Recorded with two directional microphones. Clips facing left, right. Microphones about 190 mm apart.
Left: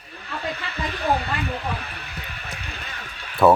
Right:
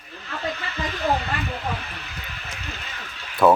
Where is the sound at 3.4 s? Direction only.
Centre (ahead or behind).